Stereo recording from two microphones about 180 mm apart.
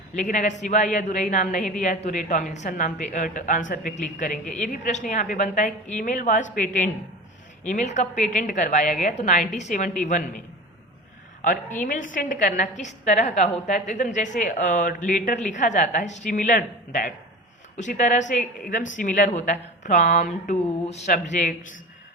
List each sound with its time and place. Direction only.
0.1 s speech: 45° left (ahead or behind)
11.4 s speech: 45° left (ahead or behind)